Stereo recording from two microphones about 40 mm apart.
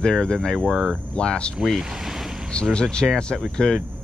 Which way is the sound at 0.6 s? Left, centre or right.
Centre.